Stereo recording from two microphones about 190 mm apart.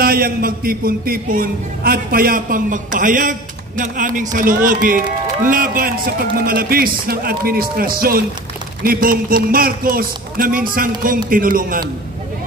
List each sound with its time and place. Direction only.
0.0 s a man's voice: 50° right (ahead or behind)